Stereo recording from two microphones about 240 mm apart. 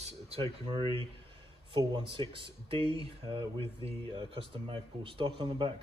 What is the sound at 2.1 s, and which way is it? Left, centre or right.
Speech, right.